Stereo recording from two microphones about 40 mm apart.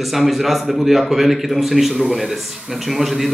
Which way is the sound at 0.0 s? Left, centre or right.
Centre.